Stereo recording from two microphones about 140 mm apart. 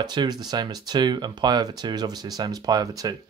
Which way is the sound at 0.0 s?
30° right (ahead or behind).